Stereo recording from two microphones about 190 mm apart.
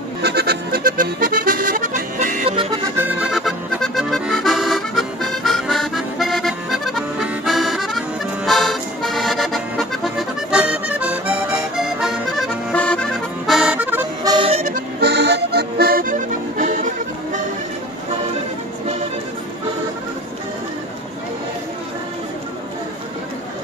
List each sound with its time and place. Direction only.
0.2 s music: 55° right (ahead or behind)
3.0 s accordion: 5° right (ahead or behind)
14.3 s music: 30° right (ahead or behind)
14.7 s music: 60° right (ahead or behind); by 16.7 s 45° right (ahead or behind)